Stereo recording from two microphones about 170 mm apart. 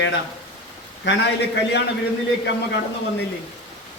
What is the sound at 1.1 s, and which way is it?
Speech, 90° left.